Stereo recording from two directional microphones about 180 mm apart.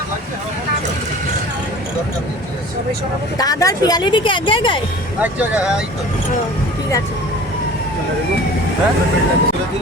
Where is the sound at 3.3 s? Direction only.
20° left (ahead or behind).